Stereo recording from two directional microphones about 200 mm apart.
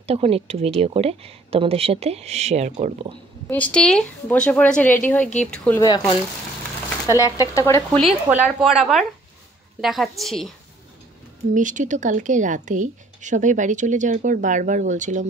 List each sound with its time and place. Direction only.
0.0 s a woman's voice: 30° right (ahead or behind)
3.4 s a woman's voice: 5° left (ahead or behind)
5.8 s a woman's voice: 20° left (ahead or behind)
8.3 s a woman's voice: 5° right (ahead or behind)
11.5 s a woman's voice: 40° right (ahead or behind)